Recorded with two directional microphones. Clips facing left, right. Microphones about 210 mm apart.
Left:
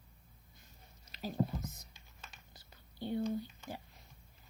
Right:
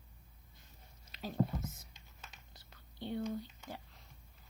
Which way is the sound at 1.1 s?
5° left (ahead or behind).